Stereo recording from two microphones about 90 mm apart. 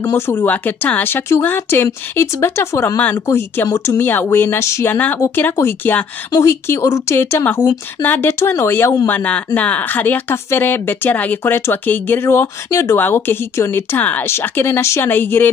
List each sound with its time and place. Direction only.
0.0 s a woman's voice: 30° left (ahead or behind)
4.9 s a woman's voice: 20° left (ahead or behind)
9.0 s a woman's voice: 15° left (ahead or behind)